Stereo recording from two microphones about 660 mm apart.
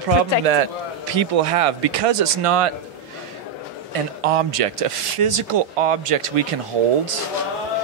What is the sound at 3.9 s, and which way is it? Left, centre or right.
Speech, right.